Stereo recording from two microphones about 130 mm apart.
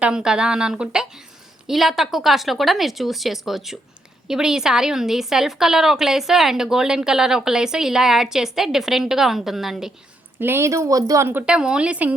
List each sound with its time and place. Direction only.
0.0 s a woman's voice: 5° right (ahead or behind)
10.3 s a woman's voice: 15° right (ahead or behind)